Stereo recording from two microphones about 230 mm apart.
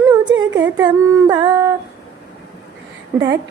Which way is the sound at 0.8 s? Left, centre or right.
Centre.